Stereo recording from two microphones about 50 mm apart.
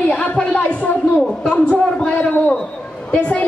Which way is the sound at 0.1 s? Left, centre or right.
Left.